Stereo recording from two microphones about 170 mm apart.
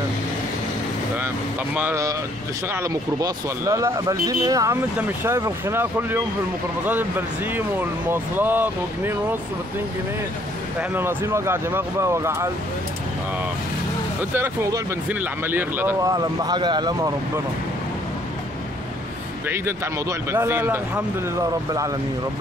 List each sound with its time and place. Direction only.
1.8 s speech: 15° right (ahead or behind)
10.8 s speech: 10° right (ahead or behind)
14.3 s speech: 10° right (ahead or behind)
19.4 s speech: 15° right (ahead or behind)